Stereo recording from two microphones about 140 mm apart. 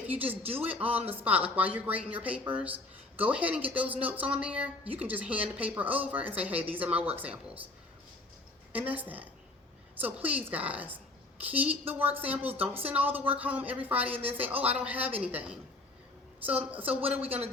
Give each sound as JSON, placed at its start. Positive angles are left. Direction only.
{"t": 0.1, "sound": "a woman's voice", "side_deg": -10}
{"t": 0.9, "sound": "speech", "side_deg": -45}
{"t": 1.1, "sound": "a woman's voice", "side_deg": -10}
{"t": 8.7, "sound": "a woman's voice", "side_deg": -10}